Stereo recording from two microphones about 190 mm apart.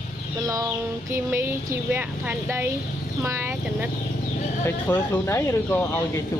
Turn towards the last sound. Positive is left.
turn(degrees=10)  # may be behind; listen again after turning